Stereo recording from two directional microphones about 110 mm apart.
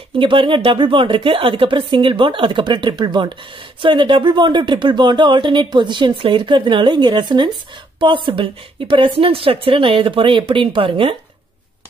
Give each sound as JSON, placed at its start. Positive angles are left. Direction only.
{"t": 0.2, "sound": "speech", "side_deg": -50}
{"t": 8.0, "sound": "speech", "side_deg": -50}